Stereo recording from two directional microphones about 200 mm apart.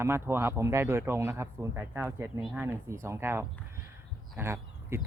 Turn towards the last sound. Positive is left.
turn(degrees=-10)  # may be behind; listen again after turning